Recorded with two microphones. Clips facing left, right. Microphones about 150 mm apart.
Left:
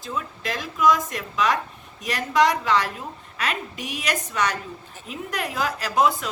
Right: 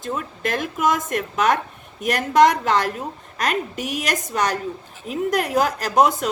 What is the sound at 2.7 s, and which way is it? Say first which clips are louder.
A woman's voice: right 2 dB; 45° right (ahead or behind).